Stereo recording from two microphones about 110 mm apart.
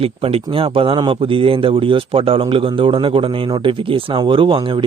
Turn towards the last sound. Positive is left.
turn(degrees=-50)  # may be behind; listen again after turning